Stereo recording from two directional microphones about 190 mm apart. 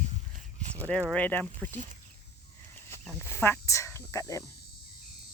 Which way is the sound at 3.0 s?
15° left (ahead or behind).